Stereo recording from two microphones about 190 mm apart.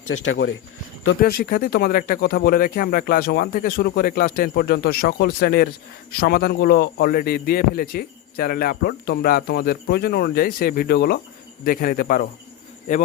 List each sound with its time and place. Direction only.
0.1 s speech: 85° left
1.2 s a man's voice: 50° left (ahead or behind)